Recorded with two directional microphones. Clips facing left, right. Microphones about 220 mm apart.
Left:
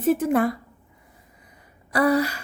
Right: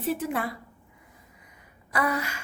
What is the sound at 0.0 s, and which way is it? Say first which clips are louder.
Speech: left 9 dB; 45° left (ahead or behind).